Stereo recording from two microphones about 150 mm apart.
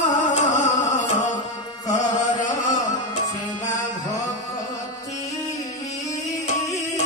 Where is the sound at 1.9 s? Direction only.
55° left (ahead or behind).